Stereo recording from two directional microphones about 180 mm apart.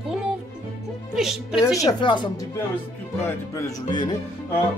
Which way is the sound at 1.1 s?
Centre (ahead or behind).